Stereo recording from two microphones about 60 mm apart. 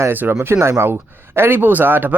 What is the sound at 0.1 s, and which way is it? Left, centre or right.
Speech, right.